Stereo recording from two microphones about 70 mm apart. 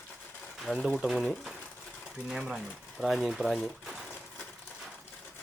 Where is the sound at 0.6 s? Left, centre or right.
Centre.